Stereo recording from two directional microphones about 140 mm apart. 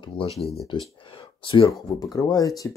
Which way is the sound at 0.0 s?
35° left (ahead or behind).